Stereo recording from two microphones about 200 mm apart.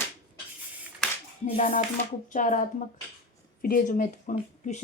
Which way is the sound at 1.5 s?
40° left (ahead or behind).